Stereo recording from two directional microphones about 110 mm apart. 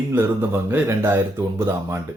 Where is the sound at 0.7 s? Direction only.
20° right (ahead or behind).